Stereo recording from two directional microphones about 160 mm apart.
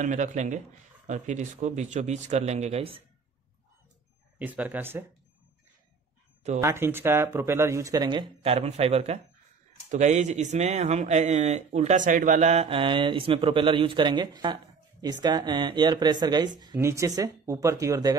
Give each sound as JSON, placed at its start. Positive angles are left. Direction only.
{"t": 0.0, "sound": "speech", "side_deg": -50}
{"t": 4.4, "sound": "speech", "side_deg": -10}
{"t": 6.6, "sound": "speech", "side_deg": -15}